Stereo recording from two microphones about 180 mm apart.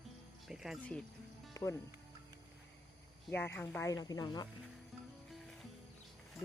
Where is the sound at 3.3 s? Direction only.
10° left (ahead or behind).